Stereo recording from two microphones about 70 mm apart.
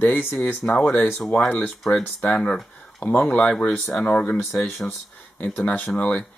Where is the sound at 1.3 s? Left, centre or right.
Left.